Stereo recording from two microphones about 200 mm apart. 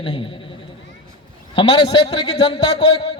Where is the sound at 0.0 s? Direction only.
25° left (ahead or behind).